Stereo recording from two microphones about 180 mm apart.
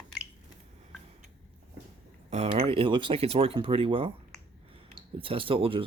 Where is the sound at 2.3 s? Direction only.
35° right (ahead or behind).